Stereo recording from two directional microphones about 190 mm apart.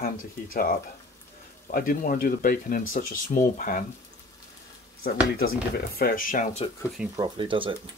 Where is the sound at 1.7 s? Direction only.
45° left (ahead or behind).